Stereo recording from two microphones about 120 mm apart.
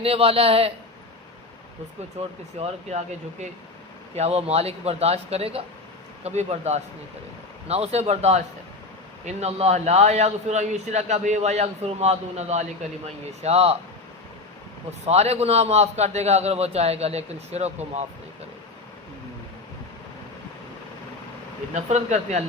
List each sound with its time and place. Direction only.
0.0 s a man's voice: 55° right (ahead or behind)
2.6 s a man's voice: 60° right (ahead or behind)
4.1 s a man's voice: 60° right (ahead or behind)
6.2 s a man's voice: 65° right (ahead or behind)
15.0 s a man's voice: 65° right (ahead or behind)
21.8 s a man's voice: 70° right (ahead or behind)